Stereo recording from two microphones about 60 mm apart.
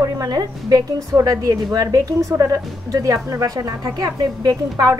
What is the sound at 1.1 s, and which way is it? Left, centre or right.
A woman's voice, right.